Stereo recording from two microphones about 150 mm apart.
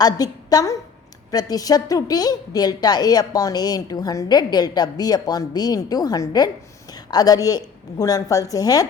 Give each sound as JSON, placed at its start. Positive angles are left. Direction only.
{"t": 0.0, "sound": "a woman's voice", "side_deg": 25}